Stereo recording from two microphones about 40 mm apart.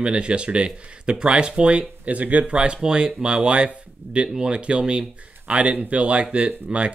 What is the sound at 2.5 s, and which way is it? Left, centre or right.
Speech, right.